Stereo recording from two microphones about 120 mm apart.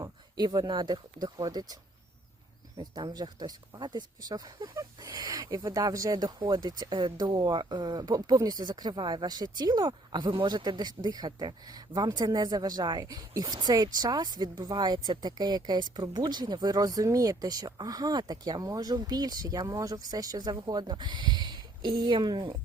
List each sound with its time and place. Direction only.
0.0 s speech: 35° right (ahead or behind)
2.9 s speech: 35° right (ahead or behind)